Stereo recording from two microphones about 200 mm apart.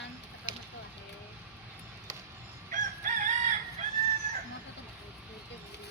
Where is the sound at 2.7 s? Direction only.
40° right (ahead or behind).